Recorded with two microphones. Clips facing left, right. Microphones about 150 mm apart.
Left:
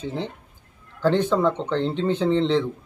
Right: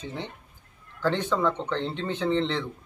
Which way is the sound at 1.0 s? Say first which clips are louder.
Left 5 dB; 15° left (ahead or behind).